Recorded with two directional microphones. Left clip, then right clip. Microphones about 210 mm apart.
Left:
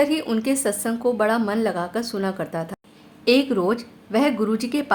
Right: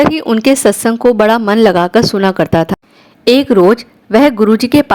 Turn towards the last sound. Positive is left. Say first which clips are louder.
# right 13 dB
turn(degrees=-40)  # may be behind; listen again after turning